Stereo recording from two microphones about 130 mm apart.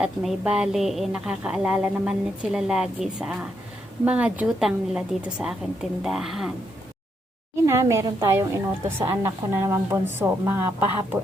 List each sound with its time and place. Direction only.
0.0 s a woman's voice: 5° right (ahead or behind)
7.6 s a woman's voice: 25° right (ahead or behind)